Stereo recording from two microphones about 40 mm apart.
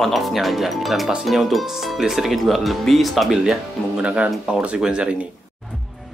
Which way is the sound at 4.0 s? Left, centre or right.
Right.